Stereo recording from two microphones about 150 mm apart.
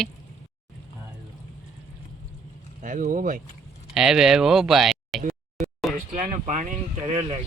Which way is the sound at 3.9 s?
5° right (ahead or behind).